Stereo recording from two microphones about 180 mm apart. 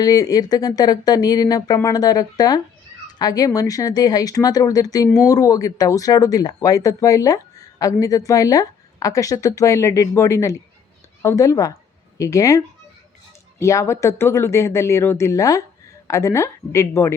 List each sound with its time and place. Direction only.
0.0 s speech: 20° left (ahead or behind)